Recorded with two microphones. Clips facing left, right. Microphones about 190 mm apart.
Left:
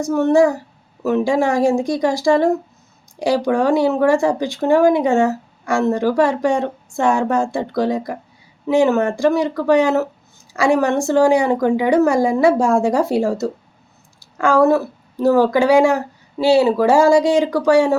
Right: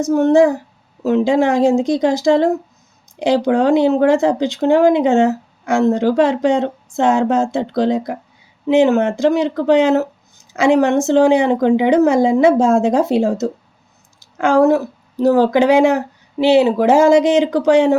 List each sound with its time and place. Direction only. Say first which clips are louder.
0.0 s a woman's voice: right 2 dB; 20° right (ahead or behind)